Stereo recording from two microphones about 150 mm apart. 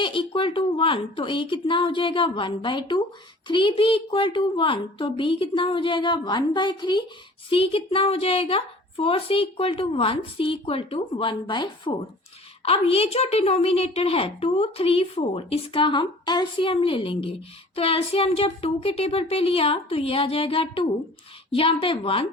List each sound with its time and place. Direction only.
0.0 s a woman's voice: 35° left (ahead or behind)